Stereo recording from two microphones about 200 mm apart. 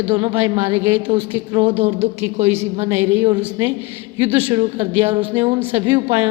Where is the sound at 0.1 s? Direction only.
25° right (ahead or behind).